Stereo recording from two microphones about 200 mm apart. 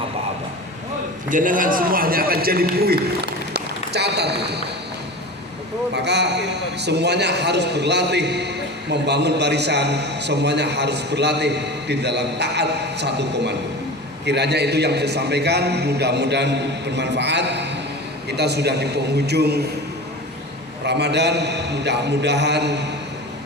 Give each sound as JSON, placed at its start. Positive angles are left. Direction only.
{"t": 1.3, "sound": "a man's voice", "side_deg": -40}
{"t": 3.5, "sound": "run", "side_deg": -55}
{"t": 5.9, "sound": "a man's voice", "side_deg": -60}
{"t": 20.8, "sound": "a man's voice", "side_deg": -60}